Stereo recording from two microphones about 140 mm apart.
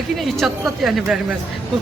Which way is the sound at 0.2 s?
Centre (ahead or behind).